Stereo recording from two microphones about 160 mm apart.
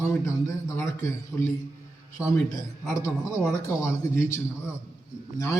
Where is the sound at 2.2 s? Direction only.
5° right (ahead or behind).